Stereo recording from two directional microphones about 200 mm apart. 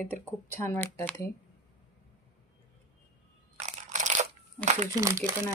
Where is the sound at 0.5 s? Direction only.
10° left (ahead or behind).